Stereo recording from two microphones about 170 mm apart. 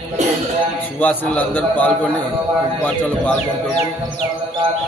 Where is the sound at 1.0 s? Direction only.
10° left (ahead or behind).